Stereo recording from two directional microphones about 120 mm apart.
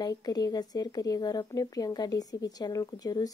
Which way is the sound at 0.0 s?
35° left (ahead or behind).